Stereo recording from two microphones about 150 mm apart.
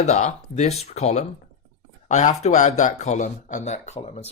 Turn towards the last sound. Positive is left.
turn(degrees=45)  # may be behind; listen again after turning